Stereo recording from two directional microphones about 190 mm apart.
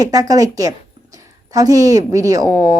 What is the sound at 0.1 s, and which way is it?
A woman's voice, 20° right (ahead or behind).